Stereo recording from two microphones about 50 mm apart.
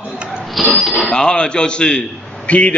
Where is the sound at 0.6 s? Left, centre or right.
Centre.